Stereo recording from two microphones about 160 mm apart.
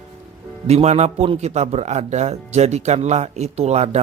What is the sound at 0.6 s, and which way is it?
A man's voice, 40° right (ahead or behind).